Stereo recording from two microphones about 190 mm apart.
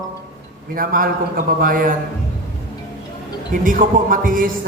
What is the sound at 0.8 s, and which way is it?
A man's voice, 50° right (ahead or behind).